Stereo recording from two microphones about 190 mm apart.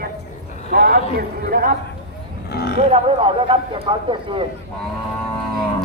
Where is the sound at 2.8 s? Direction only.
30° right (ahead or behind).